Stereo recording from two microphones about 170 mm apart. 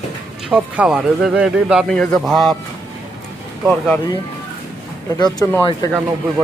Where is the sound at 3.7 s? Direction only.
5° left (ahead or behind).